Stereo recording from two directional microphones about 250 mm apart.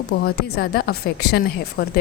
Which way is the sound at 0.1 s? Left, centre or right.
Left.